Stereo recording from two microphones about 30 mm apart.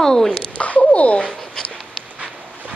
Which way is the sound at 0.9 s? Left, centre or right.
Left.